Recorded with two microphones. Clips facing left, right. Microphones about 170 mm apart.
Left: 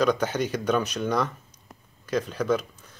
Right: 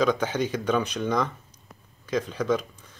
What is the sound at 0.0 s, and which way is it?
Speech, 10° left (ahead or behind).